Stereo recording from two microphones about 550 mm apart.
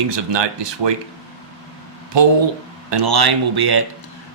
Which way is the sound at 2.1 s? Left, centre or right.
Right.